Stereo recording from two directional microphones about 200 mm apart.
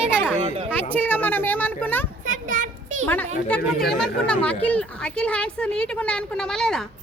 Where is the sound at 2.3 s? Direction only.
40° right (ahead or behind).